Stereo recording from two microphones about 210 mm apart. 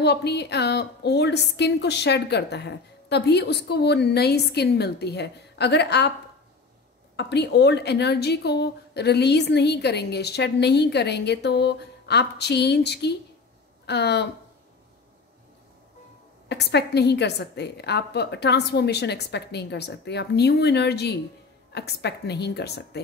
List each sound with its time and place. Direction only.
0.0 s a woman's voice: 50° left (ahead or behind)
7.2 s a woman's voice: 55° left (ahead or behind)
16.4 s a woman's voice: 55° left (ahead or behind)